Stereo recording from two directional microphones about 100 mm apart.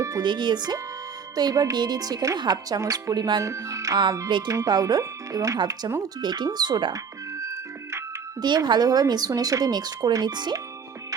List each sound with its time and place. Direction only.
0.2 s speech: 50° right (ahead or behind)
3.4 s speech: 30° right (ahead or behind)
4.3 s speech: 50° right (ahead or behind)
4.5 s speech: 35° right (ahead or behind)
6.9 s music: 30° right (ahead or behind)
8.4 s speech: 45° right (ahead or behind)